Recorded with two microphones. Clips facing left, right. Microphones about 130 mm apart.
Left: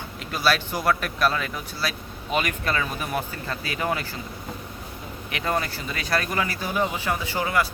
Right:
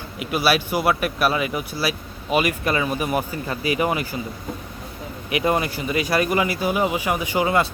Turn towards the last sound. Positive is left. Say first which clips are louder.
# right 5 dB
turn(degrees=-20)  # may be behind; listen again after turning